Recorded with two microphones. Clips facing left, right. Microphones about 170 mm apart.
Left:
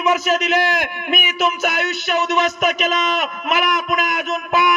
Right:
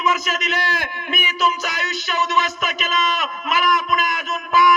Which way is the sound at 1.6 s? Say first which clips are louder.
Left 6 dB; 60° left (ahead or behind).